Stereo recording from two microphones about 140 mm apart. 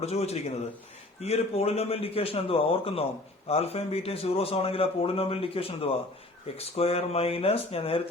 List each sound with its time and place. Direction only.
0.0 s a man's voice: 50° left (ahead or behind)